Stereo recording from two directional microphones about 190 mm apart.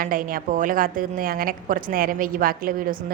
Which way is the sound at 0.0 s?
45° right (ahead or behind).